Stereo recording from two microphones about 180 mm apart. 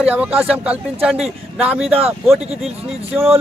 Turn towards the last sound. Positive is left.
turn(degrees=-15)  # may be behind; listen again after turning